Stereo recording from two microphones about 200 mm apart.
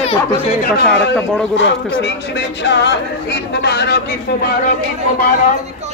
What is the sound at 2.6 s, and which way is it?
Speech, 60° left (ahead or behind).